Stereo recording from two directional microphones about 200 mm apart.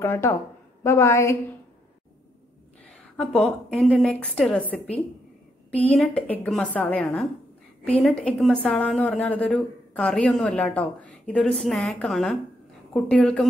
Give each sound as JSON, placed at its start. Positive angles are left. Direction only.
{"t": 0.0, "sound": "a woman's voice", "side_deg": 10}
{"t": 2.9, "sound": "a woman's voice", "side_deg": 0}